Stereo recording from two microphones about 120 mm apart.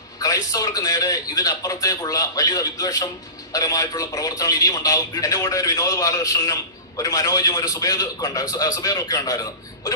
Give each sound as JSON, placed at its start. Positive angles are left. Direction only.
{"t": 0.2, "sound": "a man's voice", "side_deg": 30}